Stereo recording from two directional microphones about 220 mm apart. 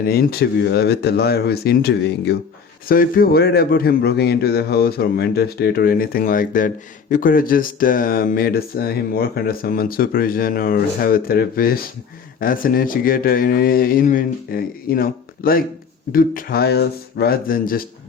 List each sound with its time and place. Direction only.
0.0 s a man's voice: 45° left (ahead or behind)